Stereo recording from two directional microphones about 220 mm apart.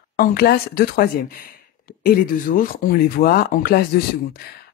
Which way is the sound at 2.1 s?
40° left (ahead or behind).